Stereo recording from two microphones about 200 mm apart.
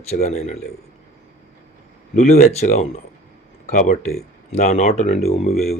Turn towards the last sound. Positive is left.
turn(degrees=30)  # may be behind; listen again after turning